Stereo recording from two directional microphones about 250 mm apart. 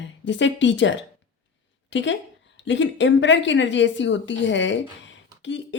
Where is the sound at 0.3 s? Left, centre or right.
Left.